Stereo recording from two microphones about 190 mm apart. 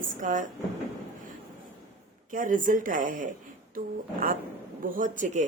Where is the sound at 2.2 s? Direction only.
45° right (ahead or behind).